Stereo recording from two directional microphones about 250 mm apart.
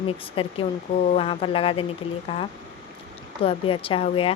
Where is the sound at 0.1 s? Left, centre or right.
Left.